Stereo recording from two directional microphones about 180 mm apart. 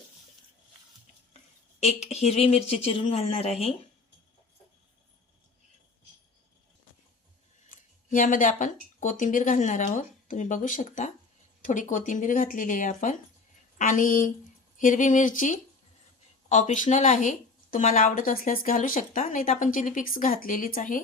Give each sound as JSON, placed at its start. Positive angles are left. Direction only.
{"t": 1.8, "sound": "speech", "side_deg": 35}
{"t": 7.7, "sound": "speech", "side_deg": 45}